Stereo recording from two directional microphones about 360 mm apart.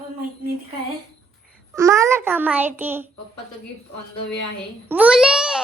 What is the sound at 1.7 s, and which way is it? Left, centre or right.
A child's voice, centre.